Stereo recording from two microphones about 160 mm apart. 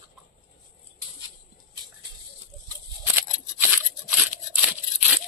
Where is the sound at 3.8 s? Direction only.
Centre (ahead or behind).